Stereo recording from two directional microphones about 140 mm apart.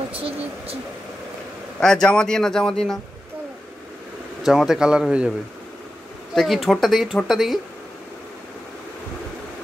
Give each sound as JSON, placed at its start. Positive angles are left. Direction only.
{"t": 0.1, "sound": "a sound", "side_deg": -40}
{"t": 1.8, "sound": "speech", "side_deg": 5}
{"t": 4.4, "sound": "speech", "side_deg": 0}
{"t": 6.3, "sound": "speech", "side_deg": 0}